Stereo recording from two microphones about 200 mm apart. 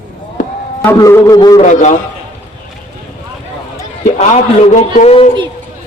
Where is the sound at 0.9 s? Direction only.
15° left (ahead or behind).